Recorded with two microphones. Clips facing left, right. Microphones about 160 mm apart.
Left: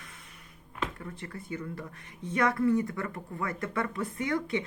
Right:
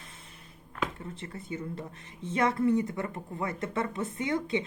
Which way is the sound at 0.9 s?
25° right (ahead or behind).